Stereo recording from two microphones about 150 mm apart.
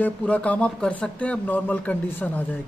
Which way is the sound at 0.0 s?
10° left (ahead or behind).